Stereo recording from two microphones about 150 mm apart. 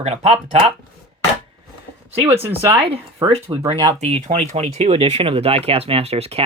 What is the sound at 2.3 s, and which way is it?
Speech, 40° right (ahead or behind).